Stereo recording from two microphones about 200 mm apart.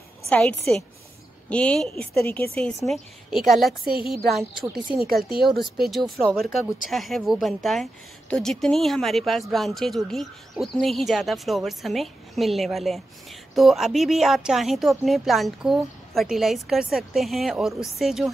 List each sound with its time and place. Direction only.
0.3 s a woman's voice: 5° left (ahead or behind)
5.0 s speech: 50° right (ahead or behind)
5.5 s a woman's voice: centre (ahead or behind)